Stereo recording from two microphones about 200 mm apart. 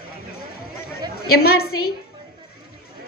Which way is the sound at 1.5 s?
50° left (ahead or behind).